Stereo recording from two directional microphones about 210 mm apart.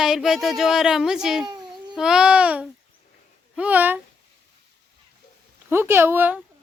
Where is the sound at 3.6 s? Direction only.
5° right (ahead or behind).